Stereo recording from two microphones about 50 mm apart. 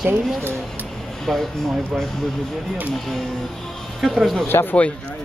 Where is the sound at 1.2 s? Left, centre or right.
Centre.